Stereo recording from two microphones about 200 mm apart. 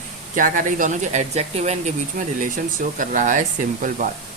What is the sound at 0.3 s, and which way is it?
Speech, 40° right (ahead or behind).